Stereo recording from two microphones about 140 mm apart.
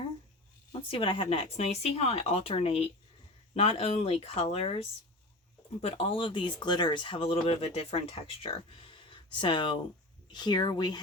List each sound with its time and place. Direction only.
0.7 s a woman's voice: 40° left (ahead or behind)